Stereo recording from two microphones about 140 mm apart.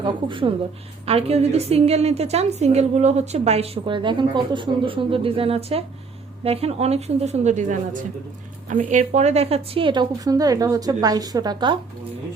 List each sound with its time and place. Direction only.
0.0 s a woman's voice: 35° right (ahead or behind); by 7.8 s 55° right (ahead or behind)
8.9 s a woman's voice: 55° right (ahead or behind); by 11.8 s 30° right (ahead or behind)